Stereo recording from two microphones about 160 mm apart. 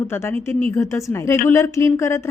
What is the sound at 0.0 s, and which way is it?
A woman's voice, 15° left (ahead or behind).